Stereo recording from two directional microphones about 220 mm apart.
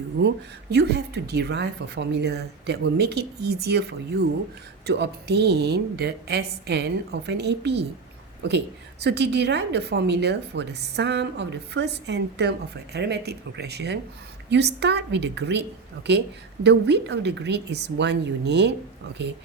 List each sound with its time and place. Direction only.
0.2 s a woman's voice: 50° right (ahead or behind)
16.6 s a woman's voice: 50° right (ahead or behind)